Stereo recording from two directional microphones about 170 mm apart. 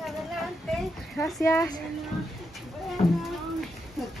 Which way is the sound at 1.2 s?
15° left (ahead or behind).